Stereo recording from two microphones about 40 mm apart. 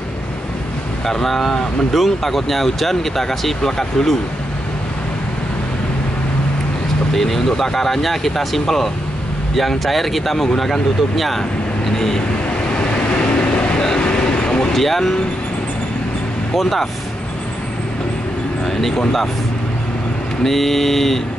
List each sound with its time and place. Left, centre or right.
1.0 s speech: centre
7.2 s speech: centre
13.4 s vehicle: left
13.7 s vehicle: left
14.7 s speech: centre
16.5 s speech: centre
18.7 s a sound: centre
20.4 s speech: centre